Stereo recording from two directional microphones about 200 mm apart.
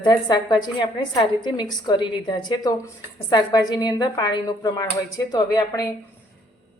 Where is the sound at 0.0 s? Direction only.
20° left (ahead or behind).